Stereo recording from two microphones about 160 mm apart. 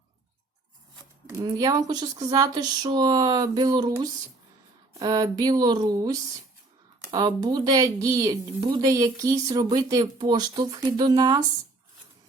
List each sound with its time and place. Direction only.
1.4 s speech: 25° right (ahead or behind)
4.9 s speech: 25° right (ahead or behind)